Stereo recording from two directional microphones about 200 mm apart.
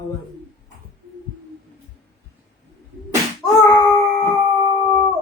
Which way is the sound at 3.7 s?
15° left (ahead or behind).